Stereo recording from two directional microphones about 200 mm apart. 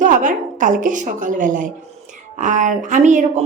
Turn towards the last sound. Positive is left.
turn(degrees=-40)  # may be behind; listen again after turning